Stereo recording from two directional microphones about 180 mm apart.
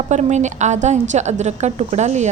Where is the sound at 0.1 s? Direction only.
40° right (ahead or behind).